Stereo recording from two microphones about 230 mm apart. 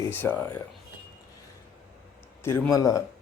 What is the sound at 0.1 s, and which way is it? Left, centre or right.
Speech, centre.